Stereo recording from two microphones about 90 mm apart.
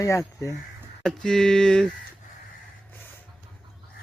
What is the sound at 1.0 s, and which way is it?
Speech, 5° left (ahead or behind).